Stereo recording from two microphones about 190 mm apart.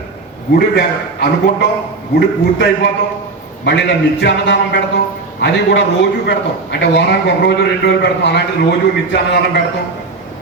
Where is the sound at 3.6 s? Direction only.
65° left (ahead or behind).